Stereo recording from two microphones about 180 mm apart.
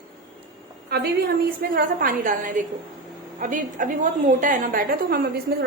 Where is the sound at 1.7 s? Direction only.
50° right (ahead or behind).